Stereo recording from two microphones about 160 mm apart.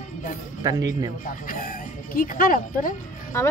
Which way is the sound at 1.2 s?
55° left (ahead or behind).